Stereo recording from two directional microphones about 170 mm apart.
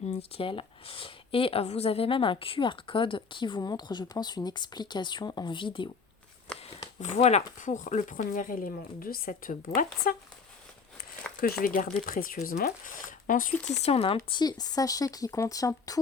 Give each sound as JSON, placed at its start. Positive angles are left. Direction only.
{"t": 0.1, "sound": "speech", "side_deg": 35}
{"t": 6.5, "sound": "a sound", "side_deg": 5}
{"t": 7.0, "sound": "speech", "side_deg": 40}
{"t": 11.6, "sound": "speech", "side_deg": 55}
{"t": 13.8, "sound": "speech", "side_deg": 35}